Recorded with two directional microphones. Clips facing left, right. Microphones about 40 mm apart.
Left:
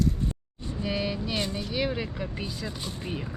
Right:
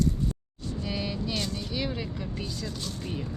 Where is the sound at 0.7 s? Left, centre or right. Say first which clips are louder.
Left 3 dB; centre.